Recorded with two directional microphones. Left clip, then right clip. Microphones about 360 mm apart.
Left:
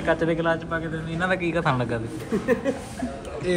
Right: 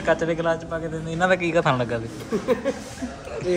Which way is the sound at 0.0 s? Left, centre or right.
Centre.